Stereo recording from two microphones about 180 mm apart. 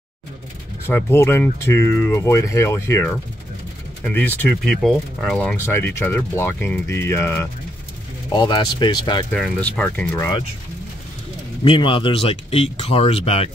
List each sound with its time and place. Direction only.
0.8 s speech: 15° left (ahead or behind)
5.7 s speech: 10° left (ahead or behind)
8.3 s speech: 25° left (ahead or behind)
9.3 s speech: 5° left (ahead or behind)
11.6 s speech: 30° left (ahead or behind)